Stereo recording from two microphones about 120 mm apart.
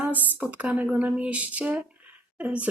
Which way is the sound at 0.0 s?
15° right (ahead or behind).